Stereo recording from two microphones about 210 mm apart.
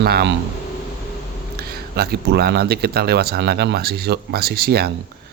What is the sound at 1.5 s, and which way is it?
Speech, 50° right (ahead or behind).